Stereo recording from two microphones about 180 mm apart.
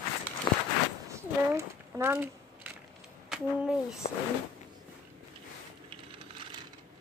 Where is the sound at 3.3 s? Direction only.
5° right (ahead or behind).